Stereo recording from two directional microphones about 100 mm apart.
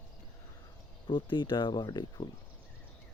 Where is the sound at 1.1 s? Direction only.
50° left (ahead or behind).